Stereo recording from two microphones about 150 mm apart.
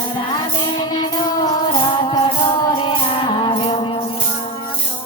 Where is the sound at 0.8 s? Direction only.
30° left (ahead or behind).